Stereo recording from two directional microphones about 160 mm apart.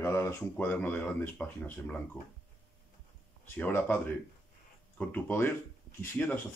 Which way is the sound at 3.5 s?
15° left (ahead or behind).